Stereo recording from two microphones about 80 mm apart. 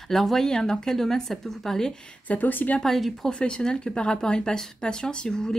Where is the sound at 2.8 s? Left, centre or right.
Centre.